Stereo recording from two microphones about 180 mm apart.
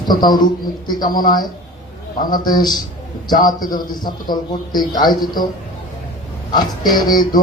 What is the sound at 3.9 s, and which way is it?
Speech, 25° left (ahead or behind).